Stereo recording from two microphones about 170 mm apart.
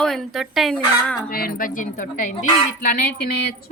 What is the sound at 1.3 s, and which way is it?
Speech, 60° left (ahead or behind).